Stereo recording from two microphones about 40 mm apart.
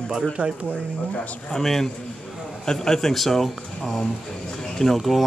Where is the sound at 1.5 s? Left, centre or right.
Centre.